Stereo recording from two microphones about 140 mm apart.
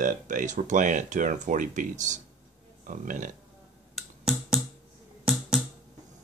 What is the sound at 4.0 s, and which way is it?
Finger snapping, 5° right (ahead or behind).